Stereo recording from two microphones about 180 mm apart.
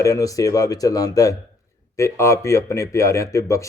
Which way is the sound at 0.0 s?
20° left (ahead or behind).